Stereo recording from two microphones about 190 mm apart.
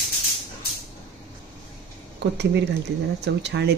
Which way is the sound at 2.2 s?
65° right (ahead or behind).